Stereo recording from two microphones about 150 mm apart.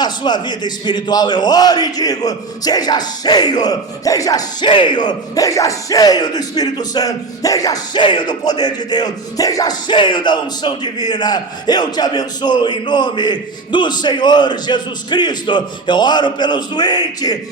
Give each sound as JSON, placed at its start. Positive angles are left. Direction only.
{"t": 0.0, "sound": "a man's voice", "side_deg": 30}